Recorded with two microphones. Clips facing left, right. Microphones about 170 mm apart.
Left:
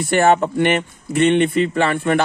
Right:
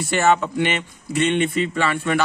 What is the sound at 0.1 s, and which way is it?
Speech, 50° left (ahead or behind).